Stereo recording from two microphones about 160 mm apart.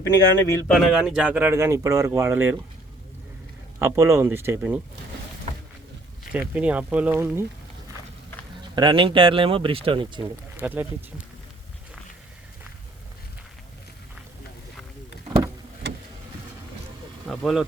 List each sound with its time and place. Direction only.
0.0 s speech: 20° left (ahead or behind)
0.7 s speech: centre (ahead or behind)
3.8 s speech: 15° right (ahead or behind)
6.5 s speech: 10° right (ahead or behind)
8.7 s speech: 30° right (ahead or behind)
10.6 s speech: 10° right (ahead or behind)
15.8 s vehicle: 90° right
17.2 s vehicle: centre (ahead or behind)